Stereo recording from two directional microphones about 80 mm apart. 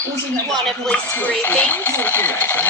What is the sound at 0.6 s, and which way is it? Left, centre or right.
Speech, centre.